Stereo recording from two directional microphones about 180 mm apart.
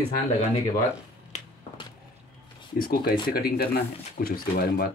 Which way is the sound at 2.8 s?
55° left (ahead or behind).